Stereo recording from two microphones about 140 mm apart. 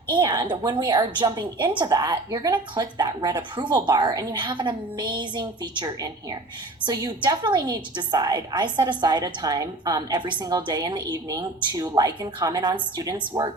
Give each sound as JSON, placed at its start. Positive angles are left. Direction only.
{"t": 0.1, "sound": "a woman's voice", "side_deg": -30}